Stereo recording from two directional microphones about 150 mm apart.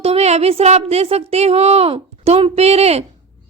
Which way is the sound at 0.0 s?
45° right (ahead or behind).